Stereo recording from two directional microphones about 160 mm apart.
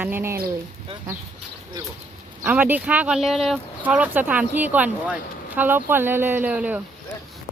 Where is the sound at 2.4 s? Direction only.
10° right (ahead or behind).